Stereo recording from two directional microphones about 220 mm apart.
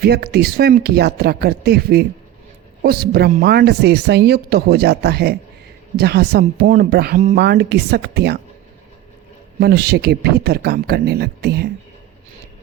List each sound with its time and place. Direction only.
0.0 s speech: 45° right (ahead or behind)
9.6 s speech: 45° right (ahead or behind)